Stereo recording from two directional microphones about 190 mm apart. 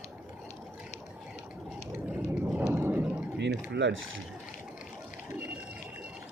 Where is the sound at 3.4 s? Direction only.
65° right (ahead or behind).